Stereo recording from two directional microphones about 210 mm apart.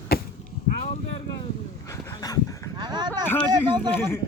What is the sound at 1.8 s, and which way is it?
Dog, 15° left (ahead or behind).